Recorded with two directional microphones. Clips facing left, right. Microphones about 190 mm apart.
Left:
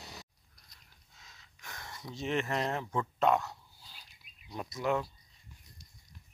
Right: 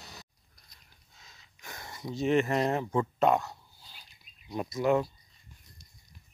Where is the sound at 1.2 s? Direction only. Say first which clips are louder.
Right 2 dB; 5° right (ahead or behind).